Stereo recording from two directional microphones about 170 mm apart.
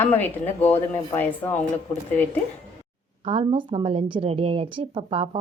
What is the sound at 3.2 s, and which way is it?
A woman's voice, 35° right (ahead or behind).